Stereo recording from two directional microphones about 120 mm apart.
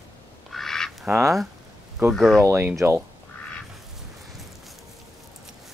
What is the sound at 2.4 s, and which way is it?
Speech, 20° right (ahead or behind).